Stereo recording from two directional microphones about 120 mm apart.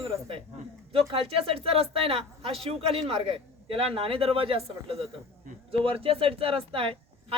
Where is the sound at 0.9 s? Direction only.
50° right (ahead or behind).